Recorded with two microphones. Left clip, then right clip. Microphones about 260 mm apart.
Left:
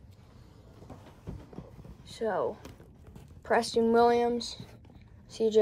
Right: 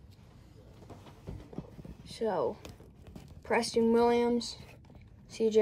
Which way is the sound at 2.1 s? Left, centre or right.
Centre.